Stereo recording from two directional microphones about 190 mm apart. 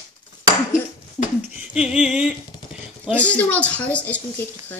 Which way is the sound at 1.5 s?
5° right (ahead or behind).